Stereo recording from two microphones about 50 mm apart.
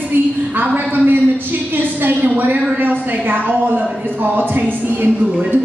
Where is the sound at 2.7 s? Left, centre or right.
Right.